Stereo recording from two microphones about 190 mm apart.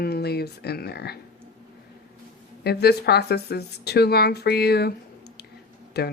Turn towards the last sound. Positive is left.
turn(degrees=60)  # may be behind; listen again after turning